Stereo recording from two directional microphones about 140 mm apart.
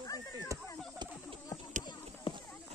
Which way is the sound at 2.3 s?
40° left (ahead or behind).